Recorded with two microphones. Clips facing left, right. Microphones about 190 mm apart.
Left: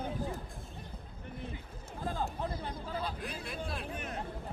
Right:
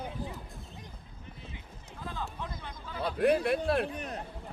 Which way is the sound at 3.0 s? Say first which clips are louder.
Right 17 dB; 65° right (ahead or behind).